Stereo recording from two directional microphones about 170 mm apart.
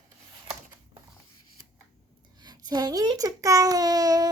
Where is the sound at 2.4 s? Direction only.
25° right (ahead or behind).